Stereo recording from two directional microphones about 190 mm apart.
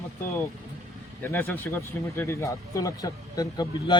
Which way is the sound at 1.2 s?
10° left (ahead or behind).